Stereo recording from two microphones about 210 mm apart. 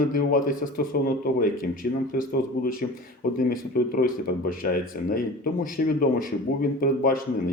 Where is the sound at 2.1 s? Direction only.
45° left (ahead or behind).